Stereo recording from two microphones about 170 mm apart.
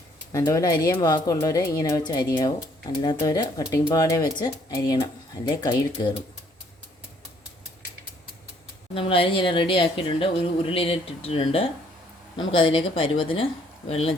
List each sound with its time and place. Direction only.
0.3 s speech: 20° left (ahead or behind)
9.0 s speech: 30° left (ahead or behind)